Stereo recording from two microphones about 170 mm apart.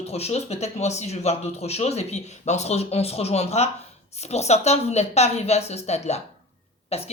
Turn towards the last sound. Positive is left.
turn(degrees=40)  # may be behind; listen again after turning